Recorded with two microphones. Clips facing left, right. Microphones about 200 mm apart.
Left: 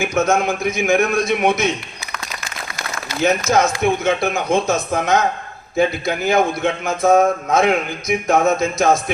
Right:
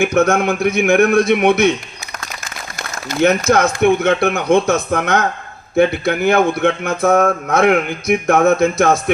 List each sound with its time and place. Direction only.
0.0 s a man's voice: 60° right (ahead or behind)
3.1 s a man's voice: 60° right (ahead or behind)